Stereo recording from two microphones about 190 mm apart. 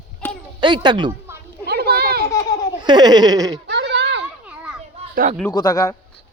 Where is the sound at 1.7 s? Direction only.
55° right (ahead or behind).